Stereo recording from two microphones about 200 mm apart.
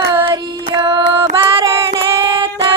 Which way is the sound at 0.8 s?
20° right (ahead or behind).